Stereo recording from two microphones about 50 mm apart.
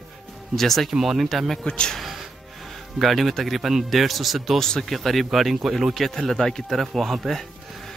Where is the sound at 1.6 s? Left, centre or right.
Centre.